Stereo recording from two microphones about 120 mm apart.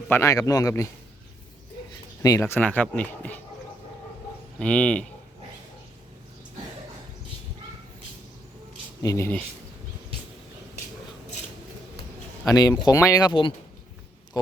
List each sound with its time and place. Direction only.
0.1 s a man's voice: 25° left (ahead or behind)
2.2 s speech: 25° left (ahead or behind)
4.6 s speech: 10° left (ahead or behind)
9.0 s speech: 30° left (ahead or behind)
12.5 s speech: 30° left (ahead or behind)